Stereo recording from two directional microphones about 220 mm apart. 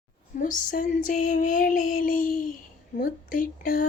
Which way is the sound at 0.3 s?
35° left (ahead or behind).